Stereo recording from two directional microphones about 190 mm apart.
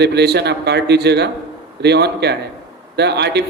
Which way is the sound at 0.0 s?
60° right (ahead or behind).